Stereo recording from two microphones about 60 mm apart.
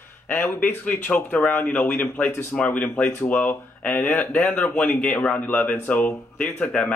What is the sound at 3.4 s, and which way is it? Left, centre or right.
Speech, left.